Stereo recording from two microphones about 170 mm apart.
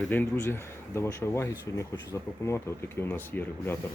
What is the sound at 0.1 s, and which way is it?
Speech, 15° left (ahead or behind).